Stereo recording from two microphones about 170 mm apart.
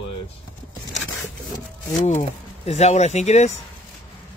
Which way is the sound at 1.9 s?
45° left (ahead or behind).